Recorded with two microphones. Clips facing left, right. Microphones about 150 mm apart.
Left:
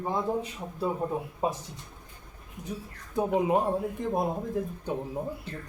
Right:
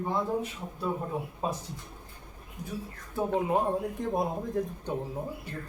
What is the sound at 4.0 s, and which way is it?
Speech, centre (ahead or behind).